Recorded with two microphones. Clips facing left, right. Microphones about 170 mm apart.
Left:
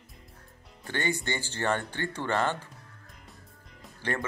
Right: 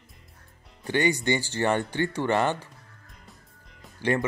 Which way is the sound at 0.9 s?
15° right (ahead or behind).